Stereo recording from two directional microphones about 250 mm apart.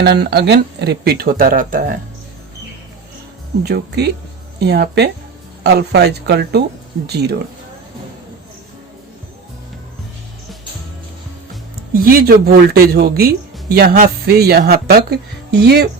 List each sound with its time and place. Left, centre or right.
0.0 s speech: right
3.6 s speech: right
12.0 s speech: right